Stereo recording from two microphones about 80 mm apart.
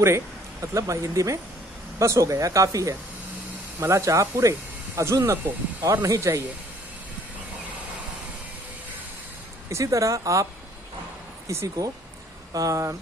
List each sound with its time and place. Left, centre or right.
0.0 s speech: right
9.7 s speech: right